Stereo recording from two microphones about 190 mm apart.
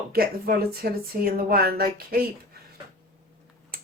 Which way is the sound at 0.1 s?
50° right (ahead or behind).